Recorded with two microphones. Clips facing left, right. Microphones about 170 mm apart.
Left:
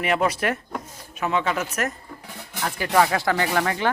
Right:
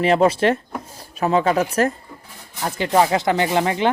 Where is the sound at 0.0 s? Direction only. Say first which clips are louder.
Right 7 dB; 30° right (ahead or behind).